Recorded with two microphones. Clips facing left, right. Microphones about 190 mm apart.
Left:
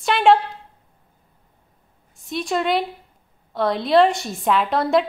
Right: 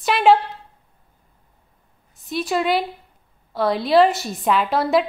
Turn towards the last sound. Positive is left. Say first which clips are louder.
# even
turn(degrees=0)  # may be behind; listen again after turning